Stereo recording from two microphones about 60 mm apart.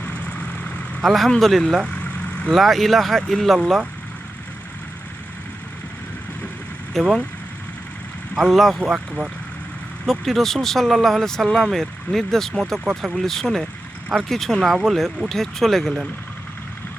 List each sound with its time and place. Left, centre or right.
0.0 s vehicle: left
1.0 s speech: centre
7.0 s speech: centre
8.4 s speech: centre
10.1 s speech: centre